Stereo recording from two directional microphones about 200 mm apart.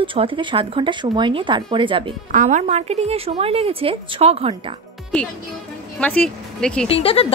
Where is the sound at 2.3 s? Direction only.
40° right (ahead or behind).